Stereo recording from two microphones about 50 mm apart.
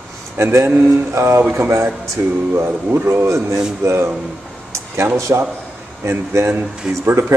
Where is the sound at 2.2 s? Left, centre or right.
Right.